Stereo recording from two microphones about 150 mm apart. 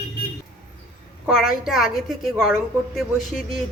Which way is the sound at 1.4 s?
Centre (ahead or behind).